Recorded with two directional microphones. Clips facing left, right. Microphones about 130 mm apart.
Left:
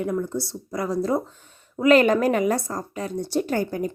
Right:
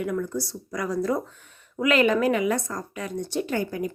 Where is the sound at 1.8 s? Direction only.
40° left (ahead or behind).